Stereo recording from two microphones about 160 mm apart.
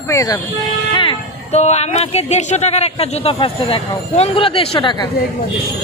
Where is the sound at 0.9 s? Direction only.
40° left (ahead or behind).